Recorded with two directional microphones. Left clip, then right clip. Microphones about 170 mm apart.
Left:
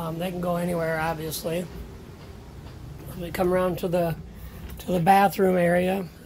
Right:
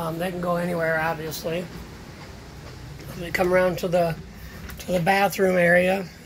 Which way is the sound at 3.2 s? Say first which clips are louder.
Right 3 dB; 15° left (ahead or behind).